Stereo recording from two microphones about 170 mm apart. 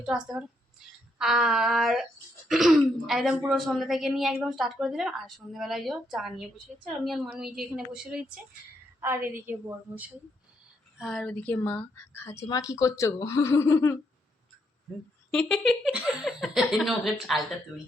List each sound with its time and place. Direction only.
0.0 s speech: 5° right (ahead or behind)
9.0 s a woman's voice: 15° right (ahead or behind)
10.9 s speech: centre (ahead or behind); by 13.9 s 15° left (ahead or behind)
15.3 s speech: 5° left (ahead or behind)